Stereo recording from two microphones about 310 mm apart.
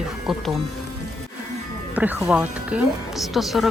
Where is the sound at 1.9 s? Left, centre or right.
Centre.